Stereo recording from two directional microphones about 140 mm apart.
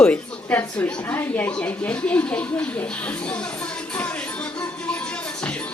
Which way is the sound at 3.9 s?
10° left (ahead or behind).